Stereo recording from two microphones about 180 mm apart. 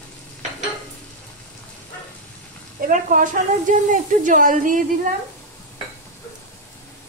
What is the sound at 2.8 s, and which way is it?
Speech, 45° right (ahead or behind).